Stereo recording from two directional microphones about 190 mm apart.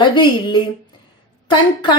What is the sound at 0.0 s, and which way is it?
A woman's voice, 25° left (ahead or behind).